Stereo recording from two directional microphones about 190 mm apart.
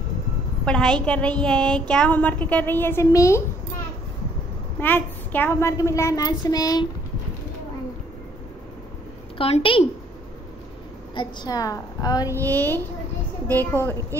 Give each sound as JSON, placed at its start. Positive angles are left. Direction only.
{"t": 0.7, "sound": "a woman's voice", "side_deg": 5}
{"t": 4.7, "sound": "a woman's voice", "side_deg": 10}
{"t": 9.4, "sound": "a woman's voice", "side_deg": 30}
{"t": 11.1, "sound": "a woman's voice", "side_deg": 20}